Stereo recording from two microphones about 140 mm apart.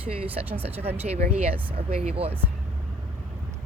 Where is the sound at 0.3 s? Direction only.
10° right (ahead or behind).